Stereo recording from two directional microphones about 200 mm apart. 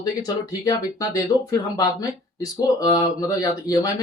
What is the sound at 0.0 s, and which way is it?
Speech, 20° left (ahead or behind).